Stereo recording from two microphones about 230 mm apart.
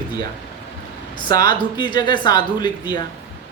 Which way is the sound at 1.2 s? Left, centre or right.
Centre.